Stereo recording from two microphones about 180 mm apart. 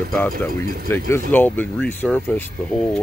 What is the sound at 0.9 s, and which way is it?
Speech, 15° left (ahead or behind).